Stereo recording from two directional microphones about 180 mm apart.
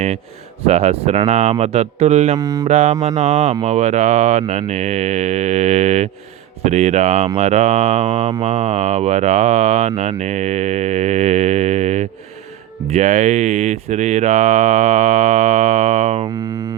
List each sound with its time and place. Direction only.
0.6 s speech: 35° right (ahead or behind)
2.4 s mantra: 20° right (ahead or behind)
2.6 s speech: 35° right (ahead or behind)
16.2 s a sound: 20° right (ahead or behind)